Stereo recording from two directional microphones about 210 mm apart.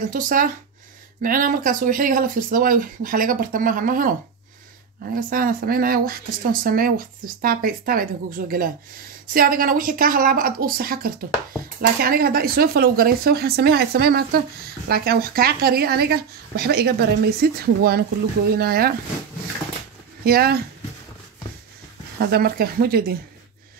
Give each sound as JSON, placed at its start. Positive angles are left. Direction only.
{"t": 0.1, "sound": "speech", "side_deg": -40}
{"t": 5.1, "sound": "speech", "side_deg": -45}
{"t": 20.2, "sound": "speech", "side_deg": -45}
{"t": 22.2, "sound": "speech", "side_deg": -45}